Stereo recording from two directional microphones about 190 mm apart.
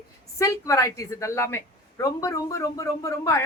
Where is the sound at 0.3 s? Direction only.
15° left (ahead or behind).